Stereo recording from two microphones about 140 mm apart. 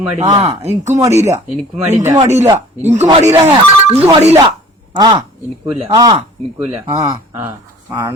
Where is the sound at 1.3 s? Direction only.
15° right (ahead or behind).